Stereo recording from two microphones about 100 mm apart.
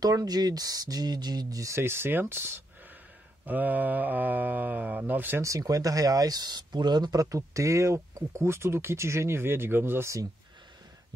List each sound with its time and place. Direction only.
0.0 s speech: 40° right (ahead or behind); by 5.4 s 20° right (ahead or behind)
5.4 s speech: 35° right (ahead or behind)